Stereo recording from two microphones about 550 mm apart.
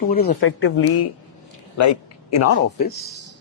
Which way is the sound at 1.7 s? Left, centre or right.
Left.